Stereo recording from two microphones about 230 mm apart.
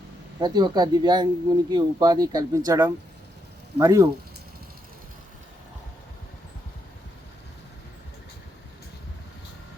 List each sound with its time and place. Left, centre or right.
0.3 s speech: centre